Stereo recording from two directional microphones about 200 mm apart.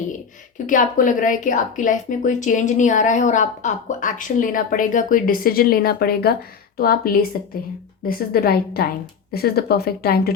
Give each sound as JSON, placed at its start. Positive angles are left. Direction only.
{"t": 0.7, "sound": "speech", "side_deg": 40}